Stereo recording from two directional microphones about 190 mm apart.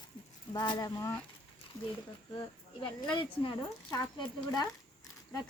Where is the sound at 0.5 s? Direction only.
20° left (ahead or behind).